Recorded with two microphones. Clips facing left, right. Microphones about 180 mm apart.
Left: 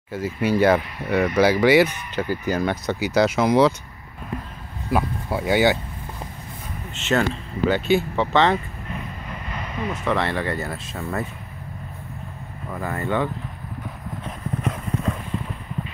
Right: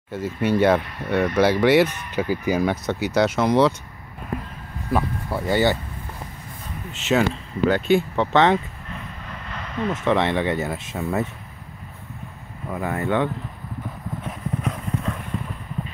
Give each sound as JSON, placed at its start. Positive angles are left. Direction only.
{"t": 0.1, "sound": "speech", "side_deg": 0}
{"t": 4.9, "sound": "speech", "side_deg": 10}
{"t": 7.0, "sound": "speech", "side_deg": 0}
{"t": 9.5, "sound": "vehicle", "side_deg": 10}
{"t": 10.0, "sound": "speech", "side_deg": -20}
{"t": 11.0, "sound": "speech", "side_deg": -5}
{"t": 12.6, "sound": "speech", "side_deg": -10}
{"t": 14.2, "sound": "clip-clop", "side_deg": 0}